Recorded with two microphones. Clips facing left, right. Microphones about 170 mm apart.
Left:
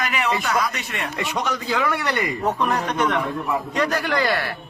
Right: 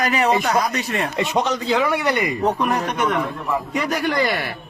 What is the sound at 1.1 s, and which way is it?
Speech, 20° right (ahead or behind).